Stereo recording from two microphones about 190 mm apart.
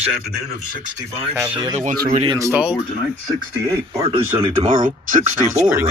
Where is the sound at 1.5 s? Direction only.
25° right (ahead or behind).